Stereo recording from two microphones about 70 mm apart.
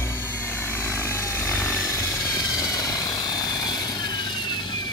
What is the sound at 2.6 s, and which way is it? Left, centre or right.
Vehicle, left.